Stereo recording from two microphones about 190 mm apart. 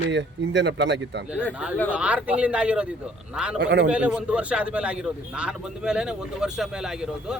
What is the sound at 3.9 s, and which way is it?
A man's voice, 5° right (ahead or behind).